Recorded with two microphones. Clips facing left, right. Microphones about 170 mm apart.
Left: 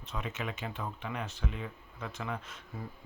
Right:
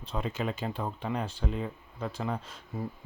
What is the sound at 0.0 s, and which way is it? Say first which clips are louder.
Speech: right 6 dB; 30° right (ahead or behind).